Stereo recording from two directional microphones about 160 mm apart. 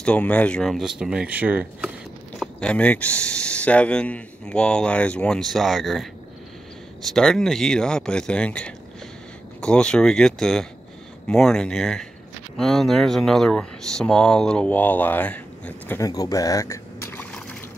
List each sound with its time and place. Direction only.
0.0 s speech: 10° left (ahead or behind); by 1.9 s 10° right (ahead or behind)
2.3 s speech: 5° left (ahead or behind)
7.1 s speech: 5° left (ahead or behind)
16.0 s liquid: 20° left (ahead or behind)